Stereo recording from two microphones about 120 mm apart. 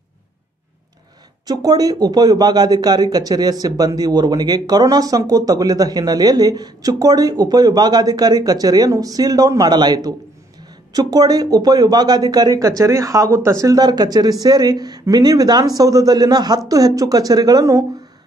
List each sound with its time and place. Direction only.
1.5 s speech: 35° right (ahead or behind)